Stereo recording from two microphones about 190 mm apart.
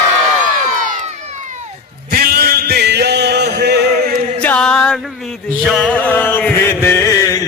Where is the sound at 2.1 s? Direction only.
50° right (ahead or behind).